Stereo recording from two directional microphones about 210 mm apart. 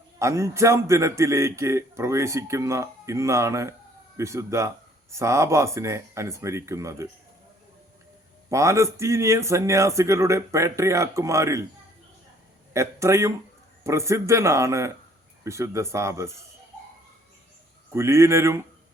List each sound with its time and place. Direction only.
0.2 s a man's voice: 15° right (ahead or behind)
8.4 s a man's voice: 15° right (ahead or behind)
12.7 s a man's voice: 15° right (ahead or behind)
17.9 s a man's voice: 15° right (ahead or behind)